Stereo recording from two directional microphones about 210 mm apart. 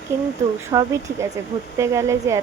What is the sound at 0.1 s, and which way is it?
A woman's voice, 15° right (ahead or behind).